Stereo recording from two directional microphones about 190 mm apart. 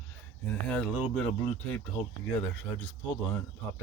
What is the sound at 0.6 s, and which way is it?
Speech, 5° left (ahead or behind).